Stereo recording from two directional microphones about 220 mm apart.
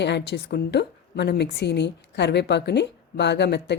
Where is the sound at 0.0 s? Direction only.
50° left (ahead or behind).